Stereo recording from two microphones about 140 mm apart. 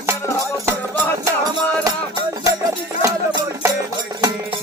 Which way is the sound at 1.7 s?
25° right (ahead or behind).